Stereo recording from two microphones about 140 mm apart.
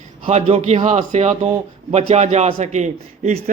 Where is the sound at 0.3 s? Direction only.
50° right (ahead or behind).